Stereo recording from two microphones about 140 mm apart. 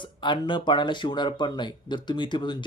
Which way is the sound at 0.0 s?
35° left (ahead or behind).